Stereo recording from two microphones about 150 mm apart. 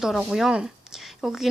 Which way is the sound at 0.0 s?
Centre (ahead or behind).